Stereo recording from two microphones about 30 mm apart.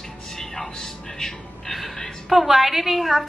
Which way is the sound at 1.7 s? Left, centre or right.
Centre.